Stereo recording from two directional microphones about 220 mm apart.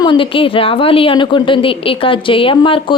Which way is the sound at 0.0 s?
20° left (ahead or behind).